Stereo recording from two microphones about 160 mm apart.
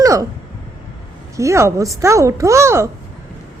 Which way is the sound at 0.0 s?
20° right (ahead or behind).